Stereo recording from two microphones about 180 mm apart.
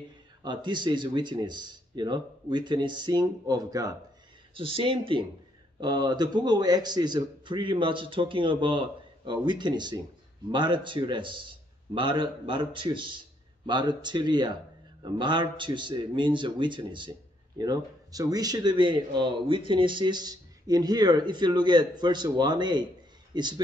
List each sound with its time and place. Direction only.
0.4 s speech: 25° right (ahead or behind)